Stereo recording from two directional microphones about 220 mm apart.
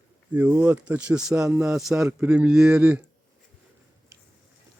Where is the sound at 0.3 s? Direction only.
5° right (ahead or behind).